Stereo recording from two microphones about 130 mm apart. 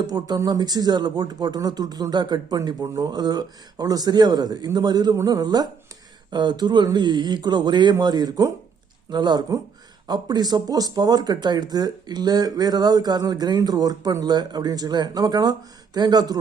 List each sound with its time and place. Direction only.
0.1 s speech: 30° right (ahead or behind)